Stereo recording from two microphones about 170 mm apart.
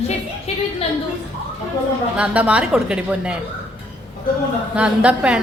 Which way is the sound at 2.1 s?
5° right (ahead or behind).